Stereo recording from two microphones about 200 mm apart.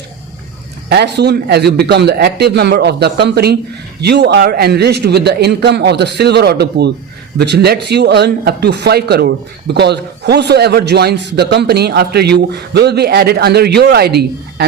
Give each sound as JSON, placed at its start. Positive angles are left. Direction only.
{"t": 0.9, "sound": "speech", "side_deg": -55}